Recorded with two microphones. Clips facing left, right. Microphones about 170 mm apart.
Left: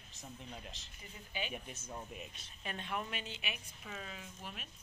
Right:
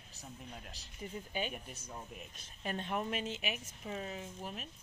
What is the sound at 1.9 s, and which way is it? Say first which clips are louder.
Speech: left 2 dB; centre (ahead or behind).